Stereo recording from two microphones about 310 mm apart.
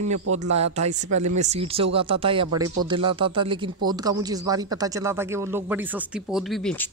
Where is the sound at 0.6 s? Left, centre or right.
Right.